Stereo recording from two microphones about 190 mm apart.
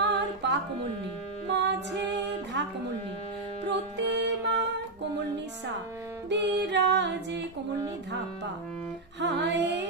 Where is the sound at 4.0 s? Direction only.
65° right (ahead or behind).